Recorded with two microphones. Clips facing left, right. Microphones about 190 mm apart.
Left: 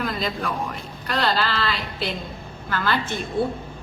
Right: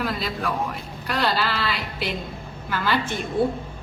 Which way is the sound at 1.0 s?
10° right (ahead or behind).